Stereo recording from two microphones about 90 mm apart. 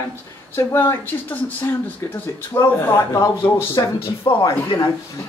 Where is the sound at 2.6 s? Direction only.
40° left (ahead or behind).